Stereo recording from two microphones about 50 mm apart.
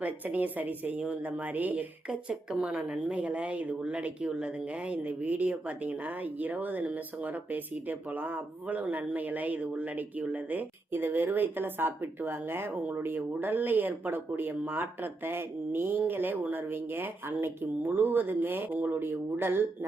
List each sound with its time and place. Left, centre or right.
0.0 s speech: right
2.0 s speech: right
2.8 s speech: right